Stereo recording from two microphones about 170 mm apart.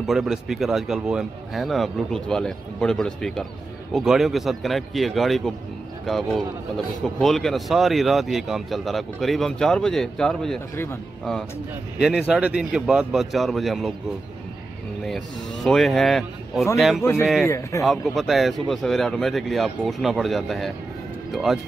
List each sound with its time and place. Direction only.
0.0 s speech: centre (ahead or behind)
12.3 s speech: 5° right (ahead or behind)
15.0 s speech: centre (ahead or behind)
17.5 s speech: 15° left (ahead or behind)
17.8 s speech: centre (ahead or behind)